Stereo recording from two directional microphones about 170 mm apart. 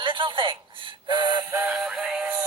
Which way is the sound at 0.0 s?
30° right (ahead or behind).